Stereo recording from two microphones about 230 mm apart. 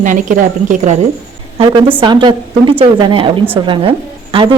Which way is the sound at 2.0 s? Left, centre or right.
Centre.